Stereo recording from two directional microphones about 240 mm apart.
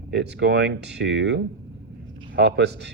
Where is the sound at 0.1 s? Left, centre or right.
Right.